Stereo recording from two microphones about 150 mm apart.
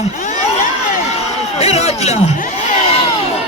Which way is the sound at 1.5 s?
45° left (ahead or behind).